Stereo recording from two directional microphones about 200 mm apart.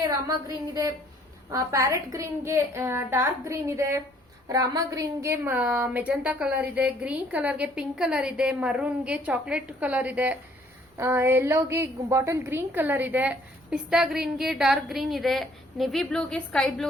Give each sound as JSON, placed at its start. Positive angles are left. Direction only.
{"t": 0.0, "sound": "a woman's voice", "side_deg": -20}